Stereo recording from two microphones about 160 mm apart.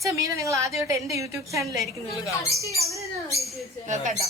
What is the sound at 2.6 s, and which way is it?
Speech, 20° left (ahead or behind).